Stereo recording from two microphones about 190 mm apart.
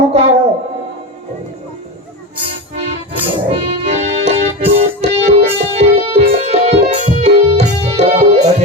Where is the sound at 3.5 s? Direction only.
35° right (ahead or behind).